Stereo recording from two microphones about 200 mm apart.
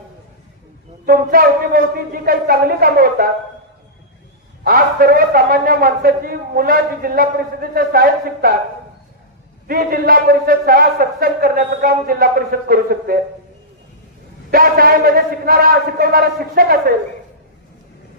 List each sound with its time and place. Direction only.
1.0 s a man's voice: 50° right (ahead or behind)
4.6 s a man's voice: 50° right (ahead or behind)
9.6 s a man's voice: 50° right (ahead or behind)
14.5 s a man's voice: 45° right (ahead or behind)